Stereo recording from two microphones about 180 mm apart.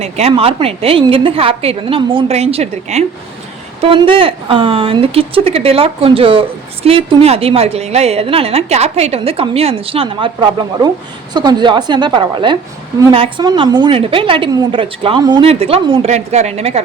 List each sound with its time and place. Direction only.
0.0 s a woman's voice: 35° right (ahead or behind)